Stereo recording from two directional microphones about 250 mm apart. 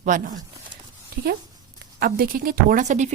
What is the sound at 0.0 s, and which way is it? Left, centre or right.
A woman's voice, right.